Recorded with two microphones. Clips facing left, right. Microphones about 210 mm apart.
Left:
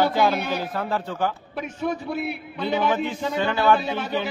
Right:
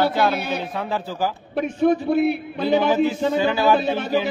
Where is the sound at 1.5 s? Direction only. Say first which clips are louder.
Right 9 dB; 55° right (ahead or behind).